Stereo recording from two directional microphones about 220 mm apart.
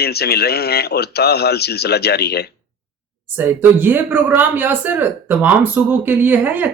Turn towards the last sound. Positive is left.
turn(degrees=-10)  # may be behind; listen again after turning